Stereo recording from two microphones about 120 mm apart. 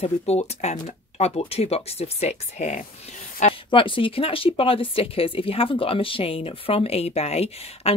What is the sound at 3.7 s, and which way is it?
Speech, 45° left (ahead or behind).